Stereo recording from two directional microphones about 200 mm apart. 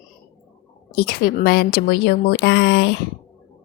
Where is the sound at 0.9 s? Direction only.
50° left (ahead or behind).